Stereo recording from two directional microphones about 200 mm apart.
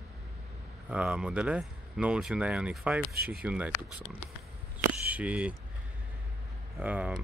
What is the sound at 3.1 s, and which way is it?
Speech, 50° right (ahead or behind).